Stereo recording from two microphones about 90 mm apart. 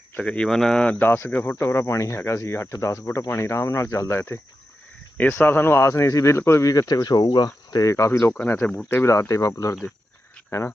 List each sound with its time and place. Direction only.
0.2 s speech: 10° left (ahead or behind)
0.9 s speech: 20° left (ahead or behind); by 6.8 s 35° left (ahead or behind)
6.8 s speech: 50° left (ahead or behind); by 8.3 s 35° left (ahead or behind)
8.3 s speech: 20° left (ahead or behind)
8.9 s speech: 30° left (ahead or behind)